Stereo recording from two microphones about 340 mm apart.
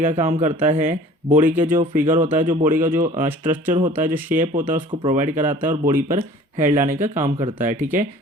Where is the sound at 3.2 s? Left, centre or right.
Centre.